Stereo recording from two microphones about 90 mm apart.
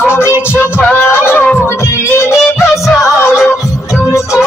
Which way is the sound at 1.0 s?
25° left (ahead or behind).